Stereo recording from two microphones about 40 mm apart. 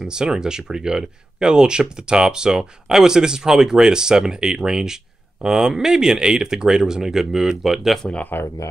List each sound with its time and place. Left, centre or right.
0.0 s speech: centre
8.3 s speech: left